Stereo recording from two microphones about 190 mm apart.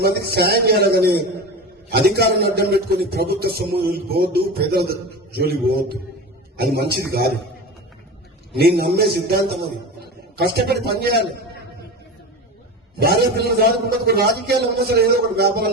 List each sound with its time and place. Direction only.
0.0 s a man's voice: 55° right (ahead or behind)
8.5 s a man's voice: 55° right (ahead or behind)
13.0 s a man's voice: 55° right (ahead or behind)